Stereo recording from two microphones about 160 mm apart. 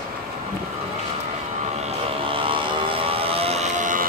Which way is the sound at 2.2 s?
35° right (ahead or behind).